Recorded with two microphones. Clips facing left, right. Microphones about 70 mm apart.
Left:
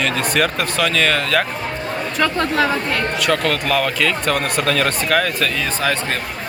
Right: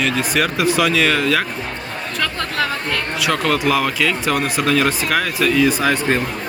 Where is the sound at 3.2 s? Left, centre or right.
Centre.